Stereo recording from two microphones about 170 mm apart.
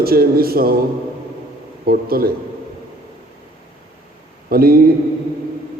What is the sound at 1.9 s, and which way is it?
Speech, 60° right (ahead or behind).